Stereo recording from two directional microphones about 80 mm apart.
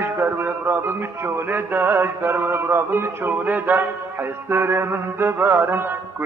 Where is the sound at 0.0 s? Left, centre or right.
Right.